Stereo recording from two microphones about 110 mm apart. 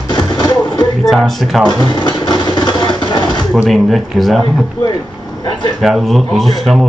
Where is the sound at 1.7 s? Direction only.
45° left (ahead or behind).